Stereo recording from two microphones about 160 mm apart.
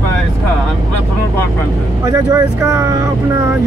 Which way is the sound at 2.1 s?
20° right (ahead or behind).